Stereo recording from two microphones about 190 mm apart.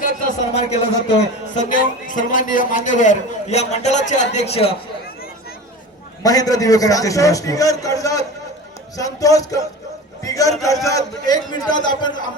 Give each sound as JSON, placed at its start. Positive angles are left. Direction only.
{"t": 0.0, "sound": "a man's voice", "side_deg": 40}
{"t": 6.2, "sound": "a man's voice", "side_deg": 20}